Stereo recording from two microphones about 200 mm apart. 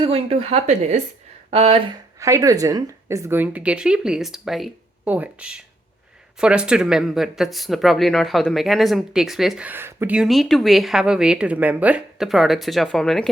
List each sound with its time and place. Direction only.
0.0 s speech: 30° right (ahead or behind)
2.2 s a woman's voice: 15° right (ahead or behind); by 13.3 s centre (ahead or behind)